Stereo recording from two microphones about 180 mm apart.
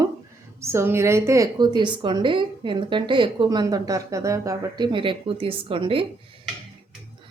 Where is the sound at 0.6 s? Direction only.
15° right (ahead or behind); by 6.1 s 30° right (ahead or behind).